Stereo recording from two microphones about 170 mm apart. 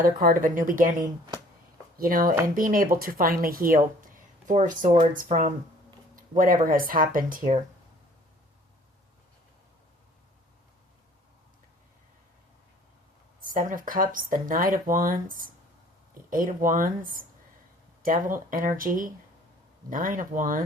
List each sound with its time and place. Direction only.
0.0 s speech: 55° right (ahead or behind)
2.0 s speech: 55° right (ahead or behind)
13.4 s speech: 55° right (ahead or behind)